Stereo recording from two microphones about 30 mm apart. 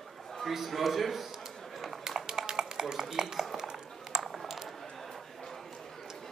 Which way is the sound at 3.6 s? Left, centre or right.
Right.